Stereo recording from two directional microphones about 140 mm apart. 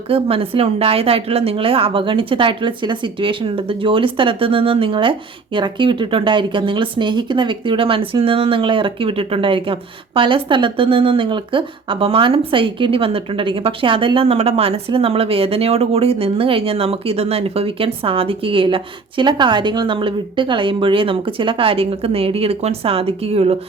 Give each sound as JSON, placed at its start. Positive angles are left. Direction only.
{"t": 0.1, "sound": "speech", "side_deg": -40}